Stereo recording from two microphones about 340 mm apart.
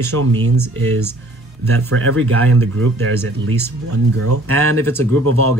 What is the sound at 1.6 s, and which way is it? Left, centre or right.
Speech, right.